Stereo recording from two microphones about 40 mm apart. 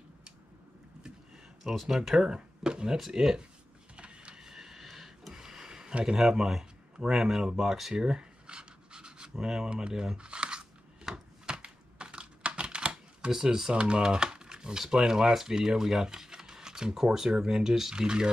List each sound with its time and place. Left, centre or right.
1.6 s speech: centre
3.9 s printer: right
4.4 s a sound: centre
6.1 s speech: centre
7.9 s rub: right
9.4 s speech: right
11.4 s typing: right
13.3 s speech: centre